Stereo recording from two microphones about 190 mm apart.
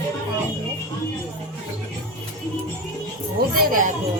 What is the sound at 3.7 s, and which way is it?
Speech, 45° right (ahead or behind).